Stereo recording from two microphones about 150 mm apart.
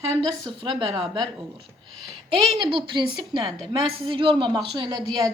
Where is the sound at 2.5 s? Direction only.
35° right (ahead or behind).